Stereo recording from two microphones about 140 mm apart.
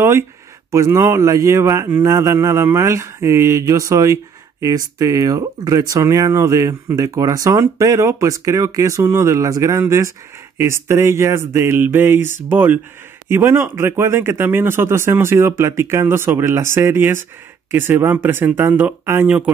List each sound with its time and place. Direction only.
0.7 s speech: 20° right (ahead or behind)